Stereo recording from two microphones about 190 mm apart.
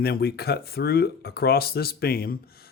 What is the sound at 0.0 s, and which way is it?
Speech, 55° left (ahead or behind).